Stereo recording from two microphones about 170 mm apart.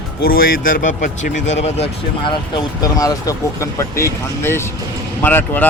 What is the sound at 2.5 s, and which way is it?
A man's voice, 20° left (ahead or behind).